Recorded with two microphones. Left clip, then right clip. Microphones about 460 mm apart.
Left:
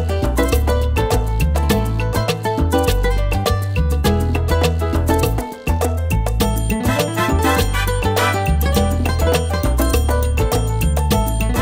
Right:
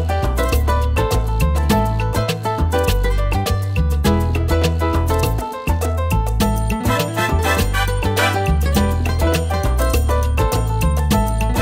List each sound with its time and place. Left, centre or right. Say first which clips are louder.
0.4 s music: left 4 dB; left
4.0 s music: right 1 dB; left
6.4 s music: left 1 dB; left